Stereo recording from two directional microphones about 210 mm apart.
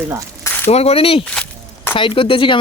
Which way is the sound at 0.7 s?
30° left (ahead or behind).